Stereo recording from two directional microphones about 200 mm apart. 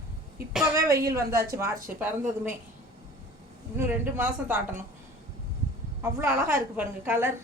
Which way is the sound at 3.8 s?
10° right (ahead or behind).